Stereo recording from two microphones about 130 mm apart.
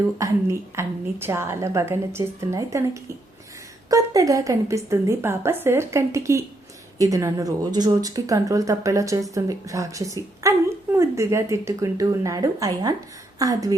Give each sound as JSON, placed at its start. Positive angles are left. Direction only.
{"t": 0.2, "sound": "a woman's voice", "side_deg": -20}